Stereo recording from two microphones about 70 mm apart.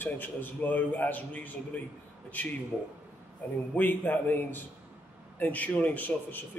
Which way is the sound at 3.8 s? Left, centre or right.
Left.